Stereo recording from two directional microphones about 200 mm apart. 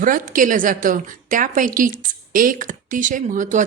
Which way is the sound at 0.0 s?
40° right (ahead or behind).